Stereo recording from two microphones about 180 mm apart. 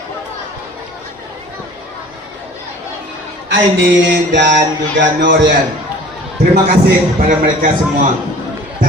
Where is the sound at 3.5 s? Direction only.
90° right.